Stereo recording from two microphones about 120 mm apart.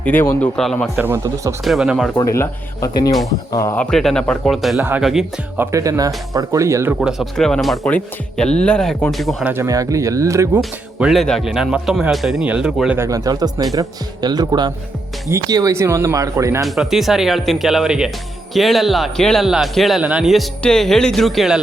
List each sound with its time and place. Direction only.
0.0 s speech: 15° left (ahead or behind)
0.9 s speech: 15° right (ahead or behind)
1.6 s speech: centre (ahead or behind)
2.1 s speech: 25° left (ahead or behind)
3.8 s speech: 5° left (ahead or behind)
4.8 s speech: 15° right (ahead or behind)
7.0 s speech: 5° right (ahead or behind)
9.4 s speech: 15° right (ahead or behind)
9.6 s speech: 30° right (ahead or behind)
10.6 s speech: centre (ahead or behind)
13.0 s speech: 30° right (ahead or behind)
16.6 s speech: centre (ahead or behind)